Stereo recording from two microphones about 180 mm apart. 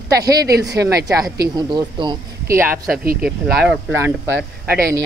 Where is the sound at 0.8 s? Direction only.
20° right (ahead or behind).